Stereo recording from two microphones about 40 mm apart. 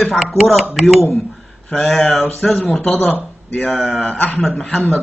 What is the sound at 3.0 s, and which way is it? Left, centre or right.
Speech, left.